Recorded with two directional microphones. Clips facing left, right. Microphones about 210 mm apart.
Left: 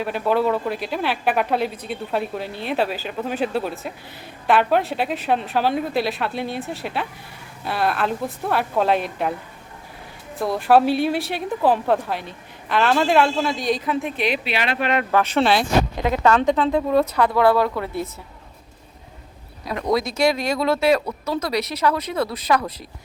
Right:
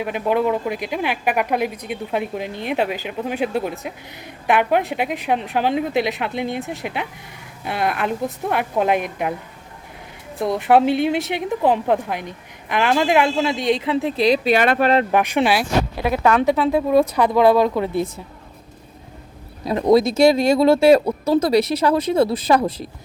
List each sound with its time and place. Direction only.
0.0 s a woman's voice: 15° right (ahead or behind)
10.4 s a woman's voice: 20° right (ahead or behind); by 14.8 s 50° right (ahead or behind)
15.1 s a woman's voice: 15° right (ahead or behind)
19.6 s a woman's voice: 25° right (ahead or behind)